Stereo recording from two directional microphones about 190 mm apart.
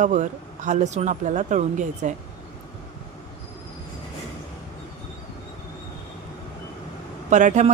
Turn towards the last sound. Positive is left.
turn(degrees=-40)  # may be behind; listen again after turning